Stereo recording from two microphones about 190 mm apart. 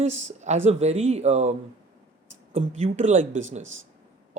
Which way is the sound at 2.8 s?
35° right (ahead or behind).